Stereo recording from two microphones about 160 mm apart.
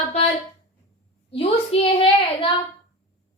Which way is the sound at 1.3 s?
35° left (ahead or behind).